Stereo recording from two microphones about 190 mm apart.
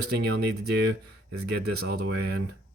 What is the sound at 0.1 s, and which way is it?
Speech, 60° right (ahead or behind).